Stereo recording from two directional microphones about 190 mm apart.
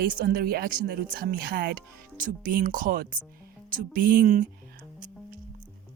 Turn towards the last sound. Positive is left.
turn(degrees=-40)  # may be behind; listen again after turning